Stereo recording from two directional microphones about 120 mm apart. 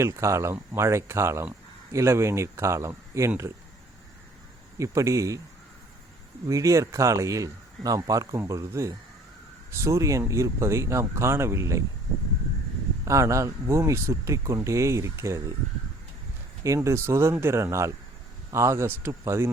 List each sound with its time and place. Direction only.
0.0 s speech: 25° right (ahead or behind)
4.8 s speech: 25° right (ahead or behind)
6.5 s speech: 25° right (ahead or behind)
13.1 s speech: 25° right (ahead or behind)
16.6 s speech: 25° right (ahead or behind)